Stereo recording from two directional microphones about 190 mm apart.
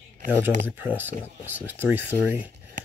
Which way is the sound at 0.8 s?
10° right (ahead or behind).